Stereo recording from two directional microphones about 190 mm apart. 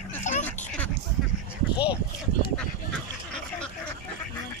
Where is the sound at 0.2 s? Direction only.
40° left (ahead or behind).